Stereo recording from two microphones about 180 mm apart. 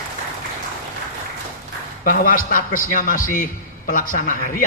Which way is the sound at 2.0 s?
50° left (ahead or behind).